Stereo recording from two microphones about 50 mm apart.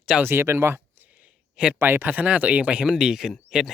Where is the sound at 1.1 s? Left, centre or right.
Right.